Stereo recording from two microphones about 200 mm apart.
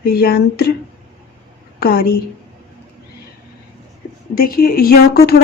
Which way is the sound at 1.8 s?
50° left (ahead or behind).